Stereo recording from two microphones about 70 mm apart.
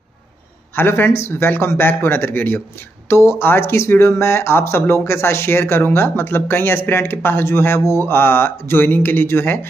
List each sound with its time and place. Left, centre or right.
0.7 s speech: left